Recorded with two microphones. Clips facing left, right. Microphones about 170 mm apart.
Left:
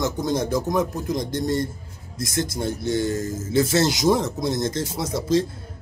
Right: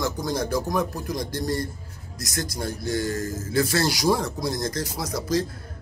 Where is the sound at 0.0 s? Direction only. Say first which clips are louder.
Left 3 dB; 20° left (ahead or behind).